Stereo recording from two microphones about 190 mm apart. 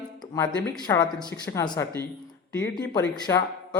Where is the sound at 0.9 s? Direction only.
15° left (ahead or behind).